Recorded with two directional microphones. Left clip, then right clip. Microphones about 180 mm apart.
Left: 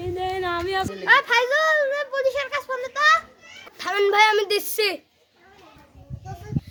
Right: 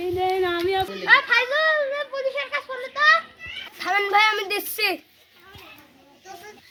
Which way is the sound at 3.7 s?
35° left (ahead or behind).